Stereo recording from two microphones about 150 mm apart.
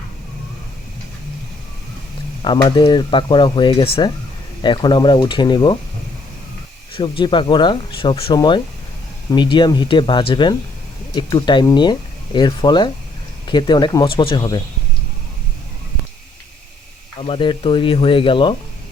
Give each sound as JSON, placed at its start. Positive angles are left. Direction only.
{"t": 2.4, "sound": "speech", "side_deg": 30}
{"t": 6.9, "sound": "speech", "side_deg": 35}
{"t": 17.2, "sound": "speech", "side_deg": 35}